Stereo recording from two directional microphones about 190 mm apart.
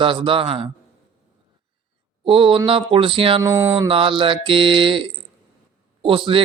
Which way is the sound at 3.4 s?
10° right (ahead or behind).